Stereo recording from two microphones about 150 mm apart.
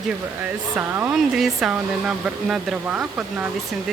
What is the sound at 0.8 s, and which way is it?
Speech, 10° right (ahead or behind).